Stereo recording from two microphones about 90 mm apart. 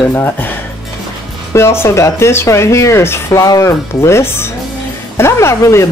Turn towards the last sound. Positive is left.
turn(degrees=35)  # may be behind; listen again after turning